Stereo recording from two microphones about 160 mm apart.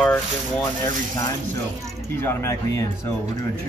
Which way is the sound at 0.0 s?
5° left (ahead or behind).